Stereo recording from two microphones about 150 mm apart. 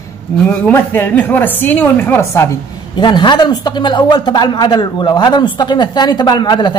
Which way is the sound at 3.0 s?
30° left (ahead or behind).